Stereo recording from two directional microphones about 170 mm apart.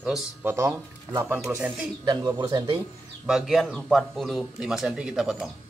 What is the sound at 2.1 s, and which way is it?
Speech, 25° right (ahead or behind).